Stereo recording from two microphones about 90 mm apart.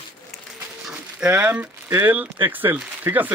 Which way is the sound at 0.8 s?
10° right (ahead or behind).